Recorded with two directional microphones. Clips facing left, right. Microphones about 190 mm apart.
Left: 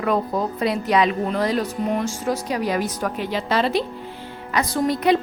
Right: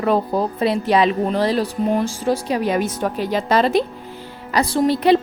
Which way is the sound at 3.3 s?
45° right (ahead or behind).